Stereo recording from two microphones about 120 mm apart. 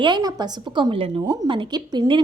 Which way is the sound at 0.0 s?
35° right (ahead or behind).